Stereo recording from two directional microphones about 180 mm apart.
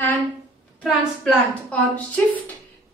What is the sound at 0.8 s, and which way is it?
A woman's voice, 5° left (ahead or behind).